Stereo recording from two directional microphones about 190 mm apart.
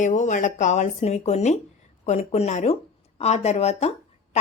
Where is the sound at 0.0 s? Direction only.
40° left (ahead or behind).